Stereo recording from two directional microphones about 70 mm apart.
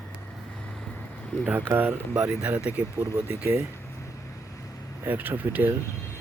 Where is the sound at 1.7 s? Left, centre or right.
Right.